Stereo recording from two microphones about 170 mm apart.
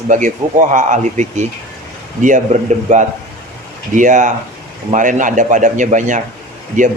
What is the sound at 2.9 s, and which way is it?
Speech, 45° right (ahead or behind).